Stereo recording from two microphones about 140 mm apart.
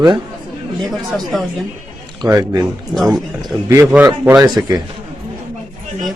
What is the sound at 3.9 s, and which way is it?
Speech, 15° right (ahead or behind).